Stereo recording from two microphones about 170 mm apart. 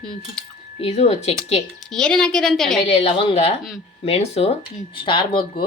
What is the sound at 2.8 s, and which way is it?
Speech, 35° left (ahead or behind).